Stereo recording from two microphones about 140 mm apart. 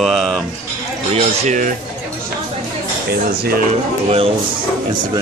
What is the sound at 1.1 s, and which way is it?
Speech, 60° right (ahead or behind).